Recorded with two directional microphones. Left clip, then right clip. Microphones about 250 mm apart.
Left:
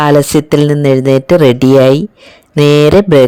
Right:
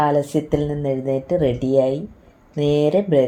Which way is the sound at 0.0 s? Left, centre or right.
Left.